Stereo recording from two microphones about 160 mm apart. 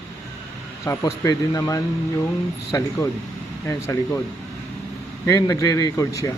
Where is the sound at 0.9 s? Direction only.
20° left (ahead or behind).